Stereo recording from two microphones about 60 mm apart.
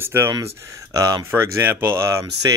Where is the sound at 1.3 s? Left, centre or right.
Right.